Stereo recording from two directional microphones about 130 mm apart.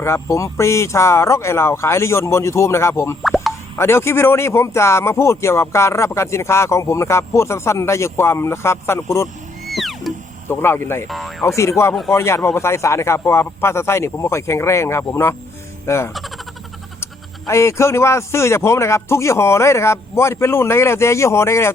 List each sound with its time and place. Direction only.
0.0 s speech: 20° left (ahead or behind)
3.2 s plop: centre (ahead or behind)
3.8 s speech: 20° left (ahead or behind)
9.6 s cat: centre (ahead or behind)
10.5 s speech: 20° left (ahead or behind)
11.1 s speech: centre (ahead or behind)
11.4 s speech: 20° left (ahead or behind)